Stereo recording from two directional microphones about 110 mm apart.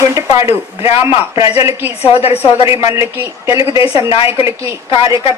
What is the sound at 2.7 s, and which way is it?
Speech, 25° right (ahead or behind).